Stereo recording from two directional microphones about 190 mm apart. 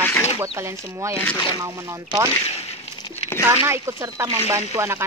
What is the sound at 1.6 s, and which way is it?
Speech, 20° right (ahead or behind).